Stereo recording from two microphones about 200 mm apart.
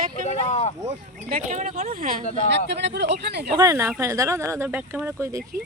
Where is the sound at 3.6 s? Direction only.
15° right (ahead or behind).